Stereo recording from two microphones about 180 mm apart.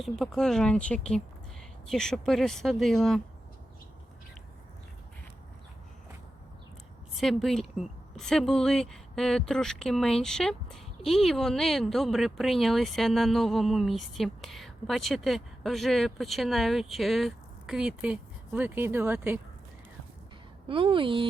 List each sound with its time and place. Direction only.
0.0 s speech: centre (ahead or behind)
7.2 s speech: centre (ahead or behind)
20.7 s a woman's voice: 30° right (ahead or behind)